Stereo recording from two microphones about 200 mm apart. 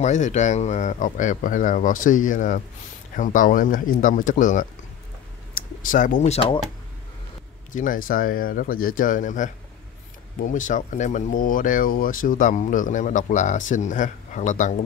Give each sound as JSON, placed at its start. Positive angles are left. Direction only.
{"t": 0.0, "sound": "speech", "side_deg": 35}
{"t": 5.8, "sound": "speech", "side_deg": 40}
{"t": 7.7, "sound": "speech", "side_deg": 40}